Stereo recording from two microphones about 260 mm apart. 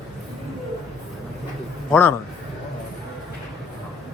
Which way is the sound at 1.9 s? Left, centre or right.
Centre.